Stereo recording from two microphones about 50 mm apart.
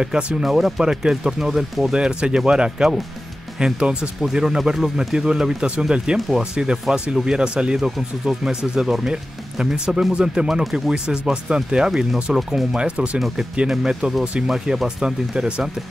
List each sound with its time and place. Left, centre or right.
0.0 s speech: centre